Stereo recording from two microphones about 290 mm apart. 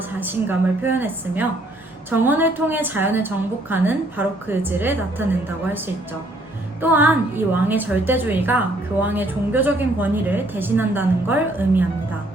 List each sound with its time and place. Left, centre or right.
0.2 s a woman's voice: centre
6.8 s a woman's voice: centre